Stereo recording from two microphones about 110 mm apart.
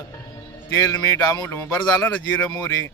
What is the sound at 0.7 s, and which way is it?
A man's voice, 25° left (ahead or behind).